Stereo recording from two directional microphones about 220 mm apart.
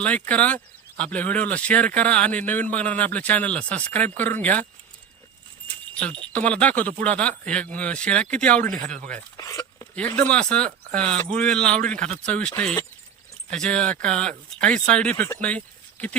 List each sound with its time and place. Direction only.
0.0 s speech: 5° left (ahead or behind)
6.0 s speech: 5° left (ahead or behind)
8.6 s speech: 40° right (ahead or behind)
9.4 s a sound: 15° left (ahead or behind)
10.2 s speech: 5° left (ahead or behind)